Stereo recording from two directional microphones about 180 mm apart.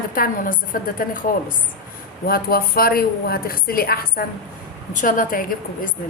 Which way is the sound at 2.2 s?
55° left (ahead or behind).